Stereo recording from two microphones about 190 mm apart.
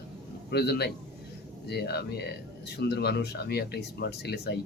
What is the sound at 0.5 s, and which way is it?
Speech, 60° left (ahead or behind).